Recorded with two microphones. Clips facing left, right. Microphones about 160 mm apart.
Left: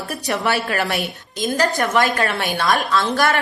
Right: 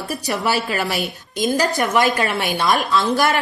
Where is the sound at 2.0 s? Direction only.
55° left (ahead or behind).